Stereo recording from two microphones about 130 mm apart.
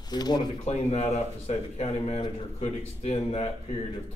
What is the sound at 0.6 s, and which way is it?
Speech, 55° left (ahead or behind).